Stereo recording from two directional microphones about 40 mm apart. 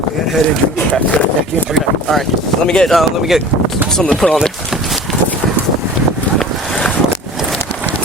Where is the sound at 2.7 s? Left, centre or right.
Centre.